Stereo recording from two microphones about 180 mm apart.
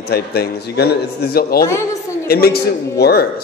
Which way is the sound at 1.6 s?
15° left (ahead or behind).